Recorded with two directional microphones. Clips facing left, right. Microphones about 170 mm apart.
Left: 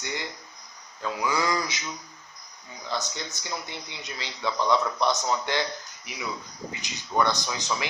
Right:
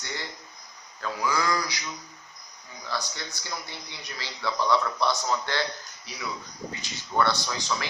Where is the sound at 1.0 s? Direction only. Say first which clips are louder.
Left 1 dB; 20° left (ahead or behind).